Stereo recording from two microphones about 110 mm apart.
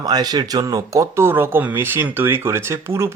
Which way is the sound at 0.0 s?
35° right (ahead or behind).